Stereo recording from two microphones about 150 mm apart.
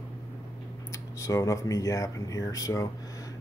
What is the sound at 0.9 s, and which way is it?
Speech, 20° left (ahead or behind).